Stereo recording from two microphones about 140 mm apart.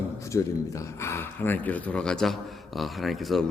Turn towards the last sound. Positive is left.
turn(degrees=0)  # may be behind; listen again after turning